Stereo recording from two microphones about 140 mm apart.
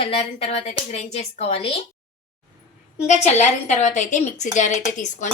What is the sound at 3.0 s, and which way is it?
A woman's voice, 55° left (ahead or behind).